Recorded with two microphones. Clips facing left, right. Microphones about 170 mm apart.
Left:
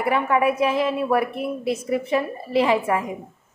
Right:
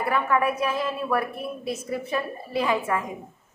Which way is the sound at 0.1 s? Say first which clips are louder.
Left 3 dB; 20° left (ahead or behind).